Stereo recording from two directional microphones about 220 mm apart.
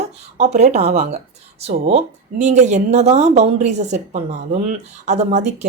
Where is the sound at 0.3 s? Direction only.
30° right (ahead or behind).